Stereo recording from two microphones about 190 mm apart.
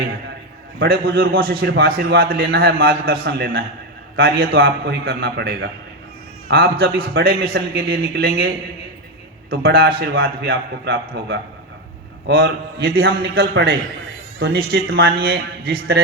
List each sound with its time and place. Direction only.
0.8 s a man's voice: 55° right (ahead or behind); by 5.6 s 70° right (ahead or behind)
6.5 s a man's voice: 55° right (ahead or behind)
9.5 s a man's voice: 55° right (ahead or behind)
10.5 s a man's voice: 80° right
11.0 s a man's voice: 65° right (ahead or behind)